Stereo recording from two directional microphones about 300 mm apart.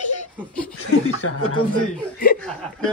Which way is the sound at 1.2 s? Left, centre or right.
Left.